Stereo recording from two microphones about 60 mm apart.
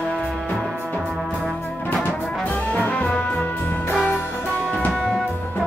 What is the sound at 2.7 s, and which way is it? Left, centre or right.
Music, left.